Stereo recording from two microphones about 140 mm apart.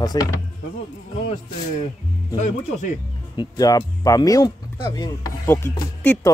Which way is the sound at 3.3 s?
25° left (ahead or behind).